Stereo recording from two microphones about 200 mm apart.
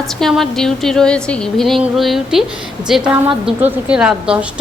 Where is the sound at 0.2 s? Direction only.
Centre (ahead or behind).